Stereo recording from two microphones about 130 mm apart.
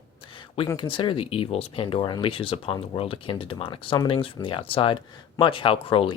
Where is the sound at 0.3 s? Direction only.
40° left (ahead or behind).